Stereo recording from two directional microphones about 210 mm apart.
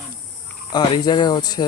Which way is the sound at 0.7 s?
20° left (ahead or behind).